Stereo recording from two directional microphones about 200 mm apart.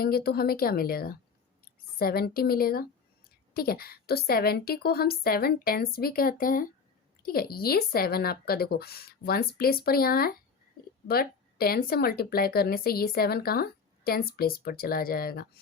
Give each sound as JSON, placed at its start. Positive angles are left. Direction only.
{"t": 0.0, "sound": "speech", "side_deg": 50}